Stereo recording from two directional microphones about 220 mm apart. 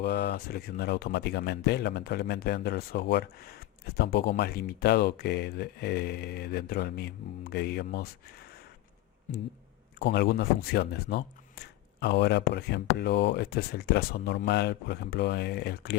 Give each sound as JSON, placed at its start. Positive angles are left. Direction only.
{"t": 0.0, "sound": "speech", "side_deg": 45}
{"t": 10.0, "sound": "speech", "side_deg": 50}